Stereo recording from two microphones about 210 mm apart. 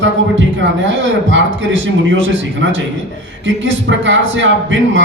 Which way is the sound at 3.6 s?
60° right (ahead or behind).